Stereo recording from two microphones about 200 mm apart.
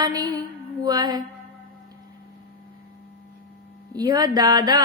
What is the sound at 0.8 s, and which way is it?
Music, 20° right (ahead or behind).